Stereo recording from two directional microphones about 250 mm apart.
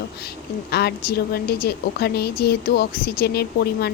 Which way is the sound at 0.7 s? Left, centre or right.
Left.